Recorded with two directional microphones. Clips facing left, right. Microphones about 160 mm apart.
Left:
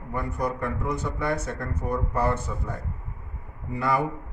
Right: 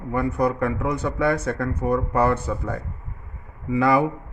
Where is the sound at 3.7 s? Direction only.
90° right.